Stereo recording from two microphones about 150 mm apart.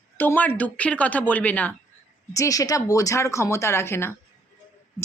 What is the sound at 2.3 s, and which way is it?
Speech, 20° left (ahead or behind).